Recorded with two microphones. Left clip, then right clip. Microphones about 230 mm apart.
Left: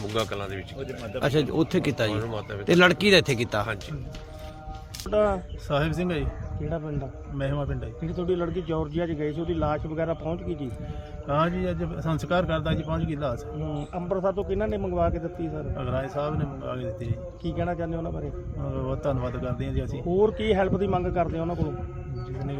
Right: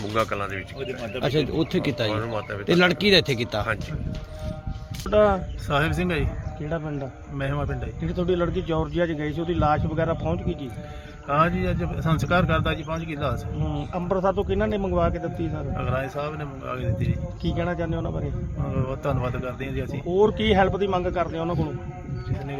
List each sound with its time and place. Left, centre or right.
0.1 s speech: centre
5.1 s a man's voice: right
5.6 s speech: centre
6.7 s a man's voice: right
7.3 s speech: centre
8.0 s a man's voice: right
11.3 s speech: centre
13.7 s a man's voice: right
15.8 s speech: centre
17.4 s a man's voice: right
18.7 s speech: centre
20.1 s a man's voice: right